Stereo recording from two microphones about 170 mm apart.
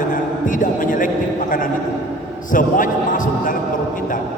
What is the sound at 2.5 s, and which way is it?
A man's voice, 50° left (ahead or behind).